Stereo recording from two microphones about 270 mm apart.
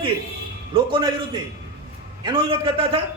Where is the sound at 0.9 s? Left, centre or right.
Centre.